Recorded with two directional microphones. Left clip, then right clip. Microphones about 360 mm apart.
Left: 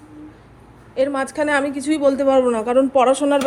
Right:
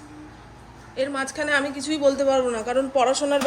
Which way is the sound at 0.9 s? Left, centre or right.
Centre.